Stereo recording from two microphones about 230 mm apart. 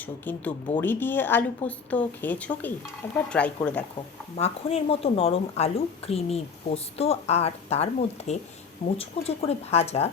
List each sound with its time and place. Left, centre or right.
0.0 s a woman's voice: centre
4.4 s speech: left